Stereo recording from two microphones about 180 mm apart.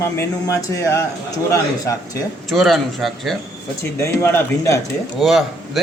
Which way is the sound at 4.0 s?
15° left (ahead or behind).